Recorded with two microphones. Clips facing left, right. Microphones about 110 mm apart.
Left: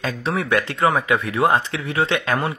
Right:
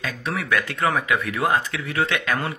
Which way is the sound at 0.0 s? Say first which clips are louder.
Left 4 dB; 30° left (ahead or behind).